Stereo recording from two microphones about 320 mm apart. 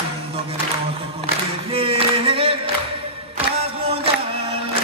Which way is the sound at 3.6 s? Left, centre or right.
Centre.